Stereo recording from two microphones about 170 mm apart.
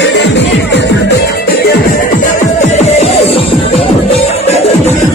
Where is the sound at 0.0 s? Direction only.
90° left; by 1.8 s 70° left (ahead or behind).